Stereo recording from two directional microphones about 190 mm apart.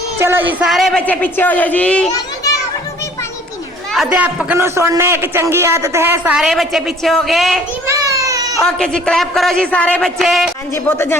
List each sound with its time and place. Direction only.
0.2 s a woman's voice: 10° right (ahead or behind); by 2.0 s 5° left (ahead or behind)
2.1 s children playing: 20° left (ahead or behind)
3.9 s a man's voice: 5° right (ahead or behind)
7.9 s a sound: 15° right (ahead or behind)
8.6 s a man's voice: 5° left (ahead or behind)
10.8 s a woman's voice: 15° left (ahead or behind)